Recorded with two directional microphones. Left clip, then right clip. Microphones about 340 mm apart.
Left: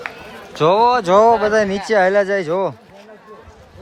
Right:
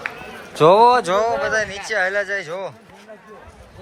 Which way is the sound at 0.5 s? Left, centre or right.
Centre.